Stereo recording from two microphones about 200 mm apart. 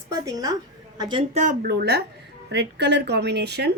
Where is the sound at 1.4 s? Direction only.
45° right (ahead or behind).